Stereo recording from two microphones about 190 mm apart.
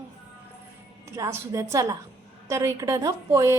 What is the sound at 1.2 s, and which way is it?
A woman's voice, 15° right (ahead or behind).